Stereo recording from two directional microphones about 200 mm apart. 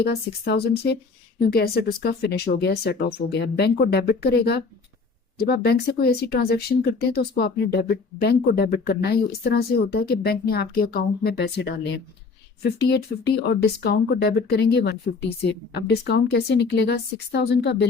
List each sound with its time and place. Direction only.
0.0 s speech: 55° left (ahead or behind)